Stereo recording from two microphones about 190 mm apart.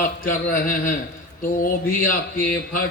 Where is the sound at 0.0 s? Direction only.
45° left (ahead or behind).